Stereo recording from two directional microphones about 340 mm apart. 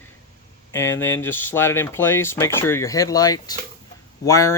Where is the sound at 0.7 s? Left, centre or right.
Centre.